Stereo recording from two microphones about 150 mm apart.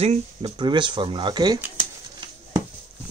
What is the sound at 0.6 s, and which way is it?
Speech, 30° right (ahead or behind).